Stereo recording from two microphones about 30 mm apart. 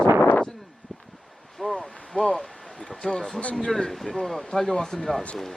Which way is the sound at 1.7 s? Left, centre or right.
Centre.